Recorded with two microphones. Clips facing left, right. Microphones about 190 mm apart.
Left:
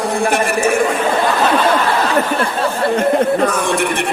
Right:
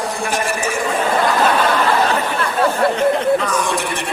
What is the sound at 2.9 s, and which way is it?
A woman's voice, 50° left (ahead or behind).